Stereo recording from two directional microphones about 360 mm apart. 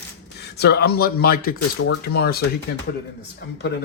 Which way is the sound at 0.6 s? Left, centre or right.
Left.